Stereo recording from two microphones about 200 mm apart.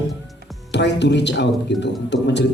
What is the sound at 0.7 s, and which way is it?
Speech, 60° left (ahead or behind).